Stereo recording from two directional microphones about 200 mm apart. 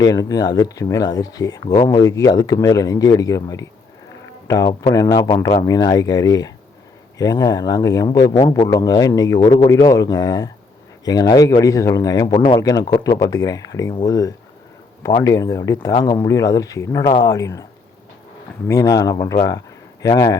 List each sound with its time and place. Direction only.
0.0 s speech: 20° left (ahead or behind)
18.7 s speech: 15° left (ahead or behind)